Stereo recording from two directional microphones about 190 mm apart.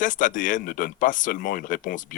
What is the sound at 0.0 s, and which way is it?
Speech, 45° left (ahead or behind).